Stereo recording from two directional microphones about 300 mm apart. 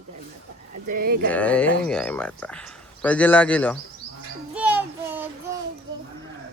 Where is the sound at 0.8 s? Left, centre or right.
Right.